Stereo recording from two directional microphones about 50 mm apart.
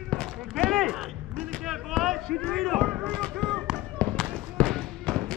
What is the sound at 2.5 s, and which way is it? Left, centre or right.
Speech, centre.